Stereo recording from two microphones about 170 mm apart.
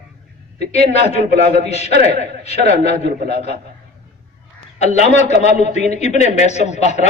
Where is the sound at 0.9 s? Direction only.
40° left (ahead or behind).